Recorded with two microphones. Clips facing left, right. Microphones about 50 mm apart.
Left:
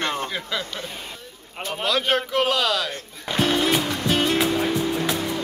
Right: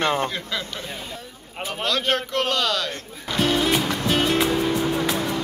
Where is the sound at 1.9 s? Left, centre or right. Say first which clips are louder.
Left 1 dB; centre.